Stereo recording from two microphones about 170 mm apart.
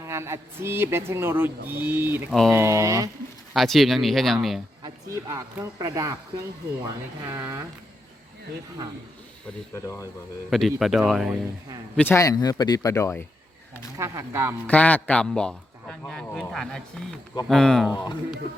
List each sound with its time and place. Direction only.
0.0 s speech: 15° right (ahead or behind)
3.5 s a man's voice: centre (ahead or behind)
4.8 s speech: 20° right (ahead or behind)
7.3 s speech: 15° right (ahead or behind)
9.7 s speech: 15° left (ahead or behind)
10.5 s a man's voice: centre (ahead or behind)
11.9 s speech: 15° left (ahead or behind)
13.9 s speech: 15° right (ahead or behind)
14.7 s a man's voice: 10° left (ahead or behind)
17.9 s speech: 25° left (ahead or behind)